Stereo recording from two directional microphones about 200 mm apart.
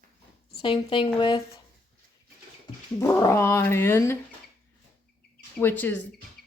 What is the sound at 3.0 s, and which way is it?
Speech, 15° left (ahead or behind).